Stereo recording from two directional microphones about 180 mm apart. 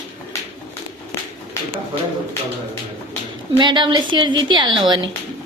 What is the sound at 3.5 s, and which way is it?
A woman's voice, 25° right (ahead or behind).